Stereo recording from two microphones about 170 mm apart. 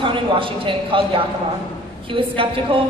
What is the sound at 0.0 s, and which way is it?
A woman's voice, 30° right (ahead or behind).